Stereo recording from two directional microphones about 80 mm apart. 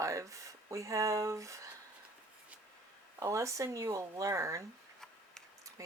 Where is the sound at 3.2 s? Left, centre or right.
Right.